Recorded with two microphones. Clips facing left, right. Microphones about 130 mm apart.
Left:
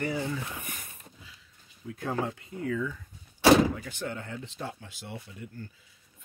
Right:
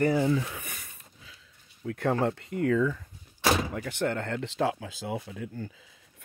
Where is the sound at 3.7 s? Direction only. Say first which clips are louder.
Right 6 dB; 55° right (ahead or behind); by 5.4 s 90° right.